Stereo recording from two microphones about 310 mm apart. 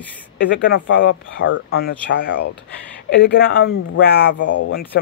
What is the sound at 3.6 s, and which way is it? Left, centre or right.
Speech, left.